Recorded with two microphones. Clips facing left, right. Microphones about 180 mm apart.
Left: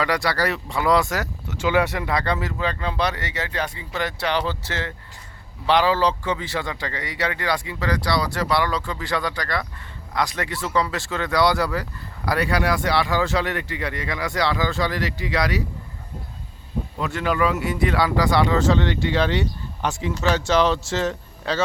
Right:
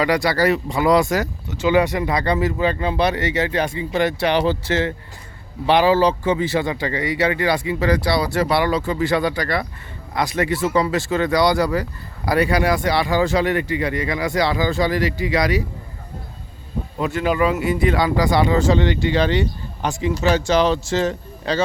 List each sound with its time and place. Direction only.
0.2 s speech: centre (ahead or behind)
1.9 s speech: 15° right (ahead or behind)
7.8 s speech: 25° right (ahead or behind)
8.4 s speech: 10° right (ahead or behind)
17.0 s speech: centre (ahead or behind)